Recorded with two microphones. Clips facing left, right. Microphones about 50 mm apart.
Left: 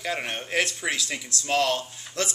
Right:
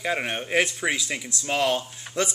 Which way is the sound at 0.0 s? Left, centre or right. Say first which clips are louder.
Right 3 dB; centre.